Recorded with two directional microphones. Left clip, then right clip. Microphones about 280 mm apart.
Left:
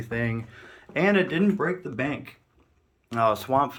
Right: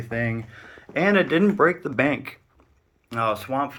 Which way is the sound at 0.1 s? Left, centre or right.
Centre.